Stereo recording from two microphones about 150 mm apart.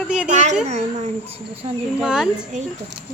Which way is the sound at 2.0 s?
5° right (ahead or behind).